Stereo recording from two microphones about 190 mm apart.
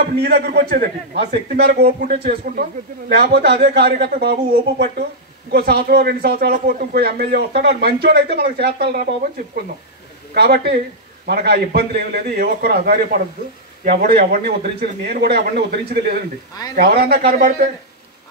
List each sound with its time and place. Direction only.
0.2 s a man's voice: 55° right (ahead or behind)
10.3 s a man's voice: 60° right (ahead or behind)